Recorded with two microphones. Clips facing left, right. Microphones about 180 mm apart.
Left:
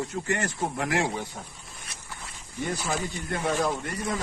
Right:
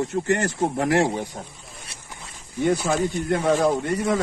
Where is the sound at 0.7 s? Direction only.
40° right (ahead or behind).